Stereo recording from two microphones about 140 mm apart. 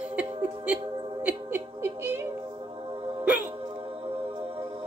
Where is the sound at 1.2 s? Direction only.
15° right (ahead or behind).